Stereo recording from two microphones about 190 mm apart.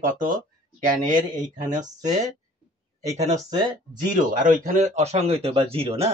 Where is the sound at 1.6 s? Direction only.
40° right (ahead or behind).